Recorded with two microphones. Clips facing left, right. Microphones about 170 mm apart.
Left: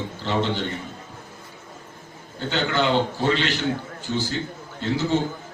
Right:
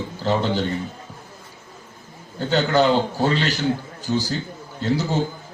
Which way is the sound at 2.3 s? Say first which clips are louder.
Right 5 dB; 40° right (ahead or behind).